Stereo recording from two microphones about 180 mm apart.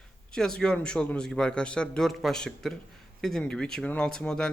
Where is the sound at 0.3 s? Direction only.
5° left (ahead or behind).